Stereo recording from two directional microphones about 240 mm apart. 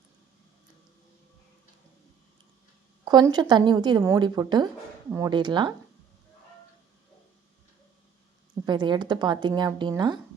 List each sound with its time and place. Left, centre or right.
3.0 s a woman's voice: centre
8.6 s a woman's voice: centre